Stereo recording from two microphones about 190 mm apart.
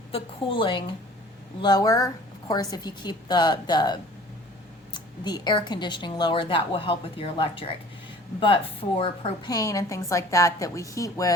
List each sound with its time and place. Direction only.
0.1 s speech: 25° left (ahead or behind)
9.5 s a woman's voice: 20° left (ahead or behind)